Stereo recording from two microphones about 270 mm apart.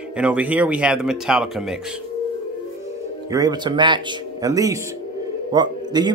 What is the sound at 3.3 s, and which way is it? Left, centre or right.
A man's voice, centre.